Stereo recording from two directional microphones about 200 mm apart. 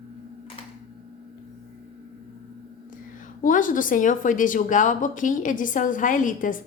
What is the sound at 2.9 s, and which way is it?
A woman's voice, 40° left (ahead or behind).